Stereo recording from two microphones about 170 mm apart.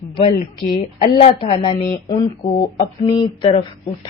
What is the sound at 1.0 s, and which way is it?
A woman's voice, 35° left (ahead or behind).